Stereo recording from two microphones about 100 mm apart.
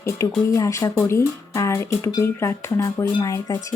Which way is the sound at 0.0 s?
30° left (ahead or behind).